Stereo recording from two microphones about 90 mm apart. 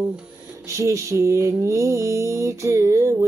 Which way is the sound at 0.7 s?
35° right (ahead or behind).